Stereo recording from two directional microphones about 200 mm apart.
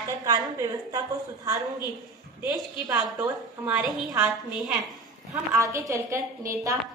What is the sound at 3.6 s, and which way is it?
Speech, 10° right (ahead or behind).